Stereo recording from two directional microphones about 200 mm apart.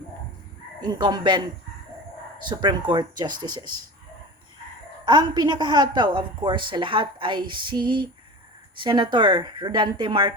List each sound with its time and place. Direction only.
0.8 s a woman's voice: 20° right (ahead or behind)
2.5 s a woman's voice: 25° right (ahead or behind)
5.0 s a woman's voice: 20° right (ahead or behind)